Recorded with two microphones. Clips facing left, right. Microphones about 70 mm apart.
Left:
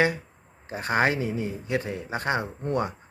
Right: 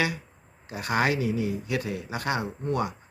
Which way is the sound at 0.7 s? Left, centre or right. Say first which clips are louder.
Left 2 dB; left.